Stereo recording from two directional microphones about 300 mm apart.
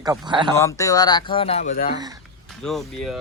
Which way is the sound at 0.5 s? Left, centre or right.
Centre.